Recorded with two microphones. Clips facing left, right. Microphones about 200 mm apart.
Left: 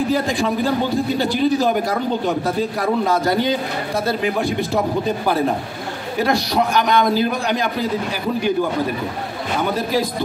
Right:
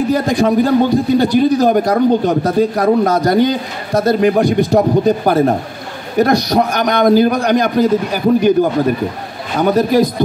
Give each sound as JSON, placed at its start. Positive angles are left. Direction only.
{"t": 0.1, "sound": "a man's voice", "side_deg": -45}
{"t": 4.5, "sound": "a man's voice", "side_deg": -20}
{"t": 4.7, "sound": "a man's voice", "side_deg": -45}
{"t": 9.6, "sound": "a man's voice", "side_deg": -45}